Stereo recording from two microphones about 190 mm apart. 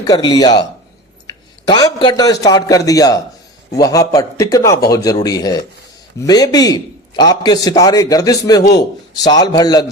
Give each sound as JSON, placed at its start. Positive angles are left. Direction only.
{"t": 0.0, "sound": "a man's voice", "side_deg": 20}